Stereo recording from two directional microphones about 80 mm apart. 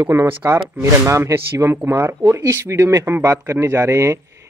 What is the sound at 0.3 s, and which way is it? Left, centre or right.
Speech, right.